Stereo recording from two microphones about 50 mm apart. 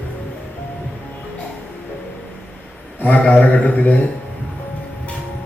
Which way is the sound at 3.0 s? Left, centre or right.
Left.